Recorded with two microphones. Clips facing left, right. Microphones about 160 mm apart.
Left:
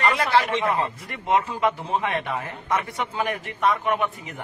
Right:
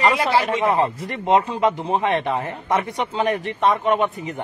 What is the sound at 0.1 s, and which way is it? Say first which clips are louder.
Speech: right 2 dB; 25° right (ahead or behind).